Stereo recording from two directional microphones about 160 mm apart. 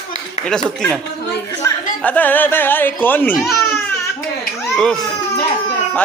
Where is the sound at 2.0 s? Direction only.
10° left (ahead or behind).